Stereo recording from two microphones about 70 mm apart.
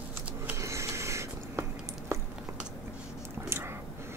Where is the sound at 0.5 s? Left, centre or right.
Right.